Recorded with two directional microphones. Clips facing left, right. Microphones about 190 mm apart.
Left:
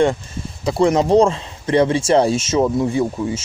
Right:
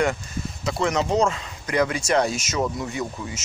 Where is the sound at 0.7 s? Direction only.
30° left (ahead or behind).